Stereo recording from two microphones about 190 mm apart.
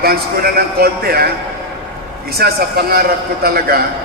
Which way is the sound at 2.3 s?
55° right (ahead or behind).